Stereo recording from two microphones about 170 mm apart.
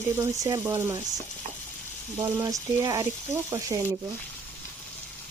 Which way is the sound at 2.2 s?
20° right (ahead or behind).